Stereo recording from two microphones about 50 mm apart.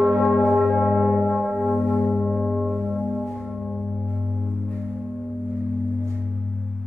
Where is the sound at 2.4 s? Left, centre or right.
Centre.